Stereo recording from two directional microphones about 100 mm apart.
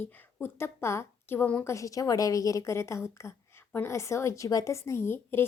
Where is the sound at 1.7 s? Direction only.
30° left (ahead or behind).